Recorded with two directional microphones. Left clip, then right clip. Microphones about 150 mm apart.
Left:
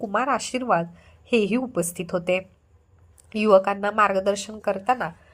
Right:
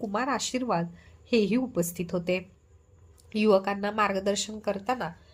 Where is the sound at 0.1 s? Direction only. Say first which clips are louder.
Left 6 dB; 20° left (ahead or behind).